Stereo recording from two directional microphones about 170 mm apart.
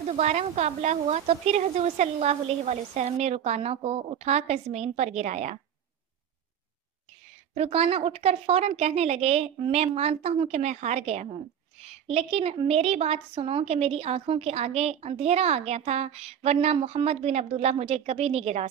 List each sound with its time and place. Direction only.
0.1 s a woman's voice: 45° right (ahead or behind)
7.5 s a woman's voice: 35° right (ahead or behind)